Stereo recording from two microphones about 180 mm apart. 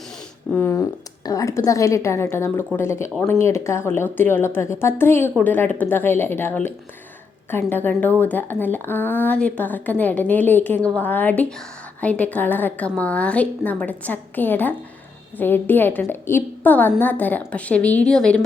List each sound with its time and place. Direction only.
0.5 s a woman's voice: 10° left (ahead or behind)